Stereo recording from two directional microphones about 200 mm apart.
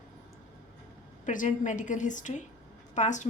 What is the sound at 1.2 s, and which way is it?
A woman's voice, 40° left (ahead or behind).